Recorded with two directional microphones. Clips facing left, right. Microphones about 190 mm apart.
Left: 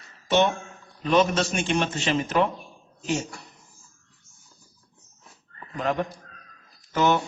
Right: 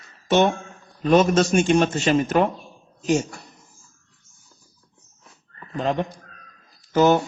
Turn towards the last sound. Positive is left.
turn(degrees=-35)  # may be behind; listen again after turning